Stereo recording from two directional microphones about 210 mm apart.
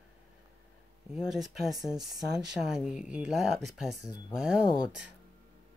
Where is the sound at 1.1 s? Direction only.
Centre (ahead or behind).